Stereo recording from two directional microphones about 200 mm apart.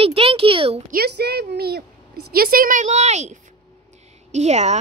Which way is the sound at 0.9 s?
50° right (ahead or behind).